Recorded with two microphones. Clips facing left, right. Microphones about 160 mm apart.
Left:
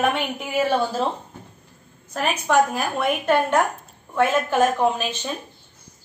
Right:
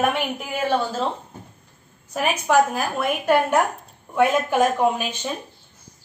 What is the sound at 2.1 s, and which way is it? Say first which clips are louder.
A woman's voice: right 1 dB; 5° right (ahead or behind).